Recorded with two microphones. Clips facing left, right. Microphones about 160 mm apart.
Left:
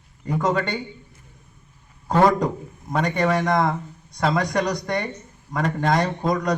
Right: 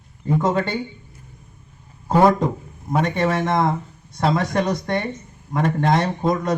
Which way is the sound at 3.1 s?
Centre (ahead or behind).